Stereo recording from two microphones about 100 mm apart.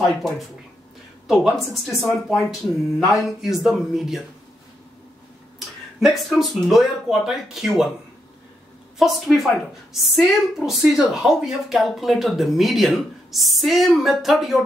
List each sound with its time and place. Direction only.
0.0 s a woman's voice: centre (ahead or behind)
5.9 s a woman's voice: centre (ahead or behind)
8.9 s a woman's voice: centre (ahead or behind)